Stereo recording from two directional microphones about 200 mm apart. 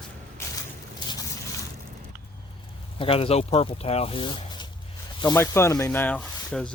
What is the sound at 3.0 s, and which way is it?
Speech, 30° left (ahead or behind).